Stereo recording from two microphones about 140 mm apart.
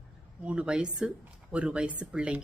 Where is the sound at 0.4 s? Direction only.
5° right (ahead or behind).